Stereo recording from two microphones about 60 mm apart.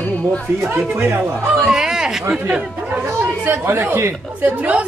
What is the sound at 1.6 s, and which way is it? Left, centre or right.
Speech, centre.